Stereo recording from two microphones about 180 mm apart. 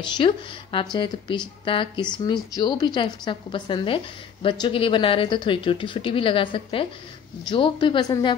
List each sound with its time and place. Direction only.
0.0 s a woman's voice: 30° left (ahead or behind)